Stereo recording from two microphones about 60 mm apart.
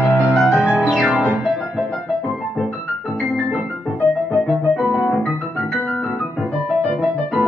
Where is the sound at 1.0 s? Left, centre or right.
Right.